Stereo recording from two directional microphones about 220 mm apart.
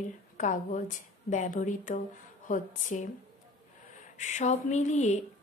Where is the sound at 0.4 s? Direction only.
35° left (ahead or behind).